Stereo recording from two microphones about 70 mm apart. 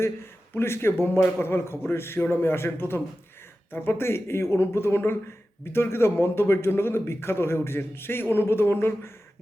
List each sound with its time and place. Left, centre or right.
0.5 s a man's voice: left